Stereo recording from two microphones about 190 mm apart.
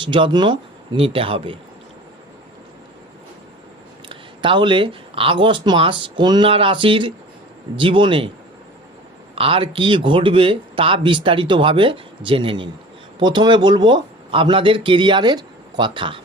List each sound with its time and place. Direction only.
0.0 s speech: 25° right (ahead or behind)
4.1 s speech: 25° right (ahead or behind)
9.3 s speech: 30° right (ahead or behind)